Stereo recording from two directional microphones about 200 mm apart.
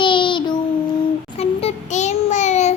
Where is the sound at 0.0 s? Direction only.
25° left (ahead or behind).